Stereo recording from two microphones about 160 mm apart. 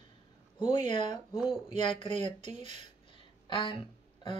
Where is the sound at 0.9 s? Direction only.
30° left (ahead or behind).